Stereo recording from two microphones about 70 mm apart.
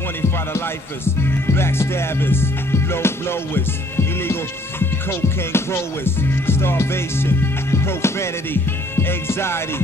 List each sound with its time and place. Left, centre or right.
1.0 s music: left